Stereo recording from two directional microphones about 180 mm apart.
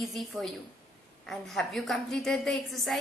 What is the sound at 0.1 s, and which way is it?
A woman's voice, centre (ahead or behind).